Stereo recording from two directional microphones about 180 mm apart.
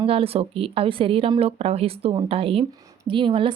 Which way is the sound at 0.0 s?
30° right (ahead or behind).